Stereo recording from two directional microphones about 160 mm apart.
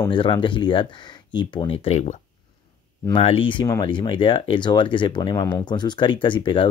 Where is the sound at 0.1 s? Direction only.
30° left (ahead or behind).